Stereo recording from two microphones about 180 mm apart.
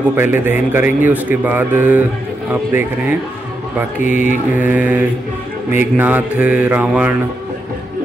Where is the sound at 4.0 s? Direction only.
45° left (ahead or behind).